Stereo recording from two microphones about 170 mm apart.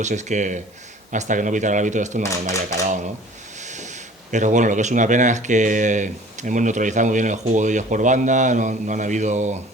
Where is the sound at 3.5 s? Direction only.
45° right (ahead or behind).